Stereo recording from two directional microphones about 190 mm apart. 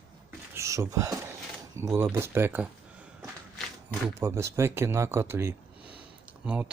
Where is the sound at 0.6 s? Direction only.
15° right (ahead or behind).